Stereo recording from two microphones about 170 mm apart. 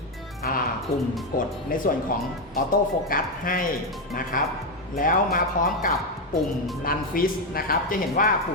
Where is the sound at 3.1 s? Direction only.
55° left (ahead or behind).